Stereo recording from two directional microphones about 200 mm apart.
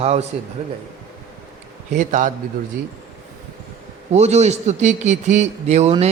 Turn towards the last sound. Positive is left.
turn(degrees=-35)  # may be behind; listen again after turning